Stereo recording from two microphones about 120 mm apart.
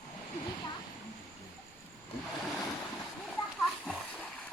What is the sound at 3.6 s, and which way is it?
Splash, 5° left (ahead or behind).